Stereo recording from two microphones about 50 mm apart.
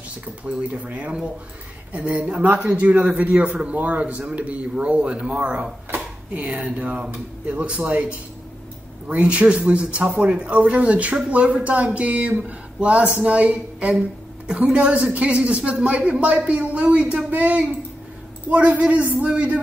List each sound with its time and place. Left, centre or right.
0.5 s speech: right